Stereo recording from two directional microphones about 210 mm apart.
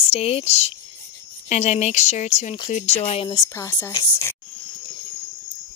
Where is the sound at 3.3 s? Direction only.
15° left (ahead or behind).